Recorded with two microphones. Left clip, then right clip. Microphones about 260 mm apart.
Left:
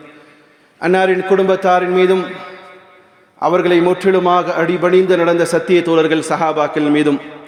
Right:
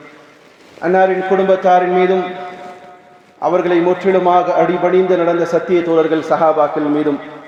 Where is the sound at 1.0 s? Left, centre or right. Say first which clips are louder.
Even; left.